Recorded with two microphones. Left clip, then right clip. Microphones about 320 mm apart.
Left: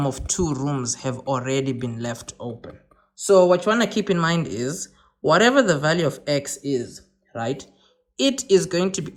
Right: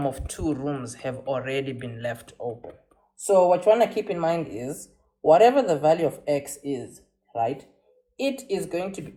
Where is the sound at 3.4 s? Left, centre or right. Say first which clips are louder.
Left 3 dB; left.